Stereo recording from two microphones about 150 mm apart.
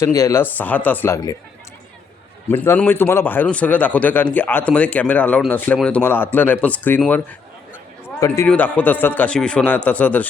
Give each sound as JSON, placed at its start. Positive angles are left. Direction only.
{"t": 0.0, "sound": "speech", "side_deg": 20}
{"t": 2.5, "sound": "speech", "side_deg": 15}
{"t": 8.4, "sound": "speech", "side_deg": 10}